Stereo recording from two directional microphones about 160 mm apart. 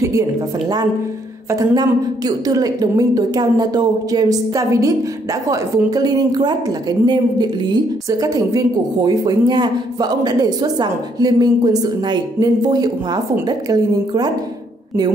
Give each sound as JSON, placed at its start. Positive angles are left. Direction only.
{"t": 1.5, "sound": "a woman's voice", "side_deg": -20}